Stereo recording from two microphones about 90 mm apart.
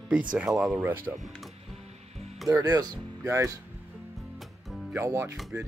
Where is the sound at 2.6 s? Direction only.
40° right (ahead or behind).